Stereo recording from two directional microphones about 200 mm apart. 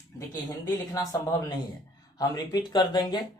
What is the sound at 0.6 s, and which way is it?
Speech, 15° left (ahead or behind).